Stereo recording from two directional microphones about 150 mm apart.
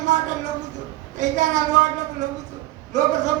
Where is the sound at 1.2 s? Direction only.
55° right (ahead or behind).